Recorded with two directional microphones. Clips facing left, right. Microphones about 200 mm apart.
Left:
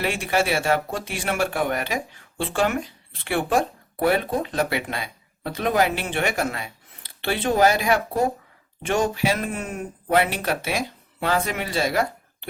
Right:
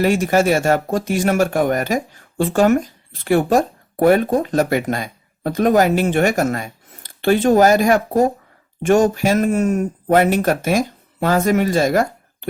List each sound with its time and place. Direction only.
0.0 s speech: 40° right (ahead or behind)